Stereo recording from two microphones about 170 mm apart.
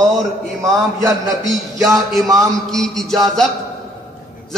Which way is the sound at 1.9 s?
Centre (ahead or behind).